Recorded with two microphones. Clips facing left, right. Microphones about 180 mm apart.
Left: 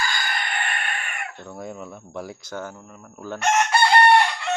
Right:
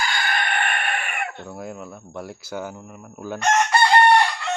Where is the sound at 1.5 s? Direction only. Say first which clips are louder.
Right 1 dB; 5° right (ahead or behind).